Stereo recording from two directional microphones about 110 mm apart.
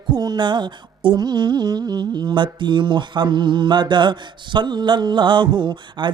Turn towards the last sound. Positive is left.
turn(degrees=-45)  # may be behind; listen again after turning